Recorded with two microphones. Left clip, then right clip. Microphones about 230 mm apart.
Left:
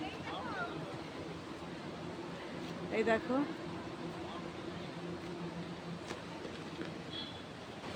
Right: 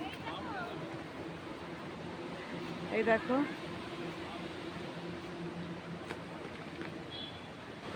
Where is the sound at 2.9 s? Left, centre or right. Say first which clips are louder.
Right 2 dB; right.